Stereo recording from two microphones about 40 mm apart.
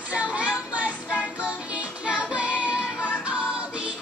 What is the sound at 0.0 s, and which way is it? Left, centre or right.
Child singing, right.